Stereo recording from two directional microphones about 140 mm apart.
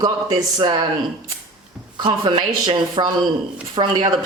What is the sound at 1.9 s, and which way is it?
A woman's voice, 35° right (ahead or behind).